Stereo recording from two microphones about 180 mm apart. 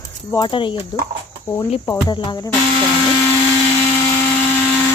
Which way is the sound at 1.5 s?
10° left (ahead or behind).